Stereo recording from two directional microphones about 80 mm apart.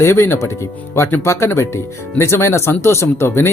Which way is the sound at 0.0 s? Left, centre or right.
Left.